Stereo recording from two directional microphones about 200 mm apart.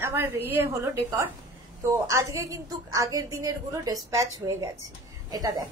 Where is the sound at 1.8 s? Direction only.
15° right (ahead or behind).